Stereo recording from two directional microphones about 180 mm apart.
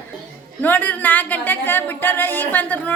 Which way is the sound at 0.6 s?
10° left (ahead or behind).